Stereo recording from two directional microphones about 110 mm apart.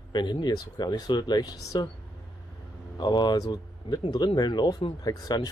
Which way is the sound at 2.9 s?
40° left (ahead or behind).